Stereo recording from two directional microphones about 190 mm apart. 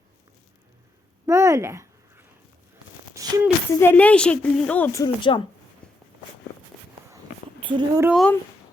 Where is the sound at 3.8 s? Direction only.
5° left (ahead or behind); by 5.5 s 25° left (ahead or behind).